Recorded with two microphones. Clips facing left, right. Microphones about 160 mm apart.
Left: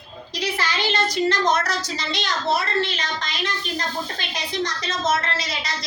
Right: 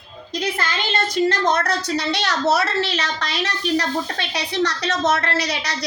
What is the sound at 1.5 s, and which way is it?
A woman's voice, 60° right (ahead or behind).